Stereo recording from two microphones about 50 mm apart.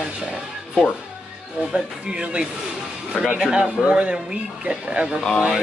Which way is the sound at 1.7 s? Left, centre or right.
Centre.